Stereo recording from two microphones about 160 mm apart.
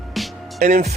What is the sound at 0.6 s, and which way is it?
Speech, 45° right (ahead or behind).